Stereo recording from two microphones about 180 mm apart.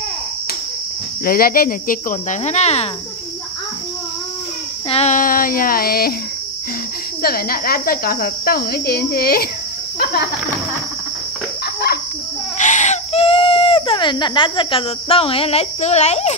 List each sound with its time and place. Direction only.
1.2 s speech: 55° left (ahead or behind); by 2.9 s 35° left (ahead or behind)
4.8 s child singing: 35° left (ahead or behind); by 6.1 s 55° left (ahead or behind)
7.2 s speech: 55° left (ahead or behind)
12.5 s baby cry: 40° left (ahead or behind)